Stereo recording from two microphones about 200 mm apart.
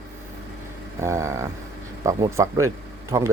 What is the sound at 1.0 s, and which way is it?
Speech, 15° right (ahead or behind).